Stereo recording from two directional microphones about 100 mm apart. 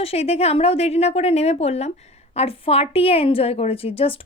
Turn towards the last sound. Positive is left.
turn(degrees=70)  # may be behind; listen again after turning